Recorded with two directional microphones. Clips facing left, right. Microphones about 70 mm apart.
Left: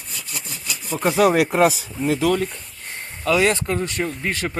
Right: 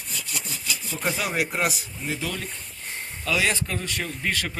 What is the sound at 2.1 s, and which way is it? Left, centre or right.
Speech, left.